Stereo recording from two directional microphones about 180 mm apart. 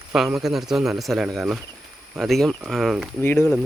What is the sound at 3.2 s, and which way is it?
Speech, 10° left (ahead or behind).